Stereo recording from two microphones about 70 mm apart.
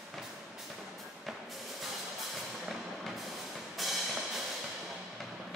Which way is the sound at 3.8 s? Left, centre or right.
Centre.